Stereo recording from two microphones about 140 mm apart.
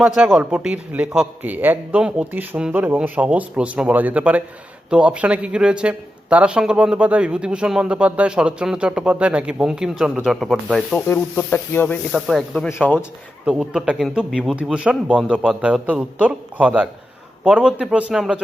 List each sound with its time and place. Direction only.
0.3 s a man's voice: 5° right (ahead or behind)
11.1 s speech: 15° left (ahead or behind)
12.3 s speech: centre (ahead or behind)
12.6 s speech: 15° left (ahead or behind)
13.4 s a man's voice: 5° right (ahead or behind)